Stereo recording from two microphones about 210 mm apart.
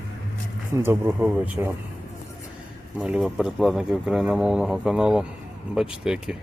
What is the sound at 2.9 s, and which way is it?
Speech, 5° right (ahead or behind).